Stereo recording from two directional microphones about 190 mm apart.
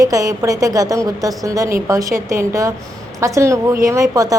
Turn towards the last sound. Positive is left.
turn(degrees=-20)  # may be behind; listen again after turning